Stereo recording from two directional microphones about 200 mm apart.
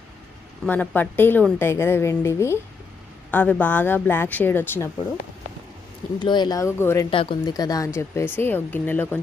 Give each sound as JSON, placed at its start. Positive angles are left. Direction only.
{"t": 0.6, "sound": "a woman's voice", "side_deg": 5}
{"t": 6.1, "sound": "a woman's voice", "side_deg": 20}
{"t": 7.1, "sound": "a woman's voice", "side_deg": 25}